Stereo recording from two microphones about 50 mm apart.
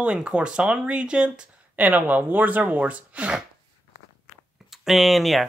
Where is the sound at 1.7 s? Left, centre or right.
Right.